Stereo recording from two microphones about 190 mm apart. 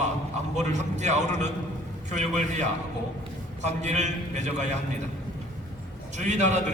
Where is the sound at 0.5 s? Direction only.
40° right (ahead or behind).